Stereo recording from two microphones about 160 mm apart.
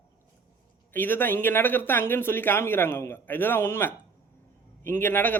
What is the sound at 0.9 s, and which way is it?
A woman's voice, 10° left (ahead or behind).